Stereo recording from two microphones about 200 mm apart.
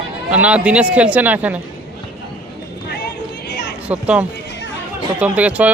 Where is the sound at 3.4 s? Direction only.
55° left (ahead or behind).